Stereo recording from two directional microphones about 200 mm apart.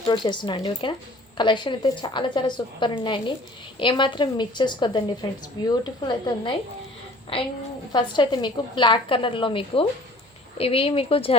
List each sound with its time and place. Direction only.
0.1 s a woman's voice: 25° left (ahead or behind)
7.9 s a woman's voice: 20° left (ahead or behind)